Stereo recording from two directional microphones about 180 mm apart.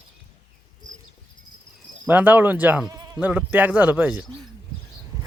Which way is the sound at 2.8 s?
20° right (ahead or behind).